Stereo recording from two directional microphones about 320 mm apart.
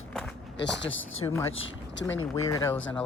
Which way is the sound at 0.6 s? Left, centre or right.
Left.